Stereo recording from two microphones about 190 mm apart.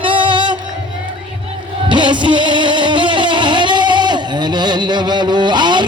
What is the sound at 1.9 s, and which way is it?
Music, 25° right (ahead or behind).